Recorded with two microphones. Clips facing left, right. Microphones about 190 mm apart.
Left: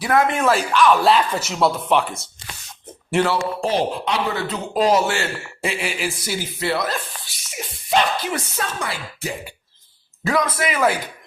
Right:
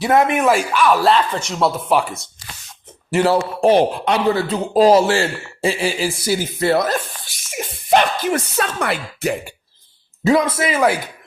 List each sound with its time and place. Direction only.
0.0 s speech: 20° right (ahead or behind); by 1.1 s 5° right (ahead or behind)
1.1 s speech: 5° left (ahead or behind)
3.2 s a man's voice: 50° right (ahead or behind)
4.3 s speech: 30° right (ahead or behind); by 9.5 s 60° right (ahead or behind)
10.2 s a man's voice: 25° right (ahead or behind)
10.8 s speech: 10° right (ahead or behind)